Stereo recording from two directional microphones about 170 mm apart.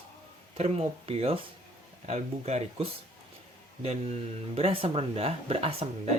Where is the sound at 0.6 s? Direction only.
35° right (ahead or behind).